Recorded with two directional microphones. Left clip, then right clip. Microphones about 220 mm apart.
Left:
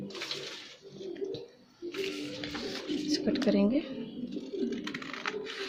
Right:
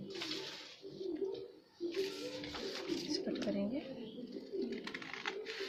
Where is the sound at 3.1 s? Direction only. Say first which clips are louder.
Left 13 dB; 40° left (ahead or behind).